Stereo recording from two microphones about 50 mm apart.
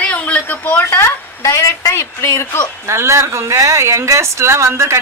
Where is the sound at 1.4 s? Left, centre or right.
Left.